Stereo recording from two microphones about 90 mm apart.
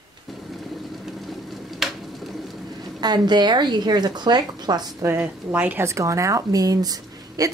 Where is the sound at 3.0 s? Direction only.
50° right (ahead or behind).